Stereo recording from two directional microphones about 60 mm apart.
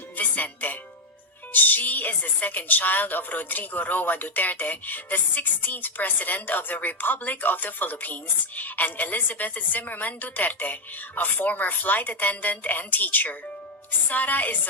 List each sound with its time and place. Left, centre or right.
0.2 s music: left
1.5 s speech: left